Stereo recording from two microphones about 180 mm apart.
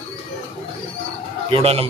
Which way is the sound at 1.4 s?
30° right (ahead or behind).